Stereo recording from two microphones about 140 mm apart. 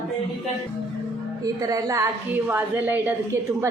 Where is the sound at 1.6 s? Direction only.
25° right (ahead or behind).